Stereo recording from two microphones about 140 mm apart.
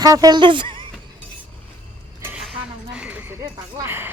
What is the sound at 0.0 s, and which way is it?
Speech, 25° right (ahead or behind).